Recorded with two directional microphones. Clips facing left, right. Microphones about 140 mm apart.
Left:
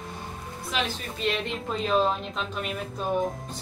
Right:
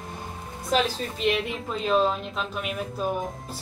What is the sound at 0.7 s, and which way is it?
Speech, 40° right (ahead or behind).